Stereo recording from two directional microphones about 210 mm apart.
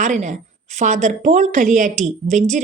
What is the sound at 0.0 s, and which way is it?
A woman's voice, 35° right (ahead or behind).